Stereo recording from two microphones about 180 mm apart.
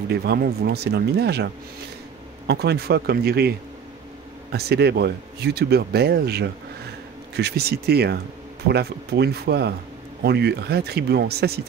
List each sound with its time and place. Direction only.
0.1 s speech: 60° right (ahead or behind)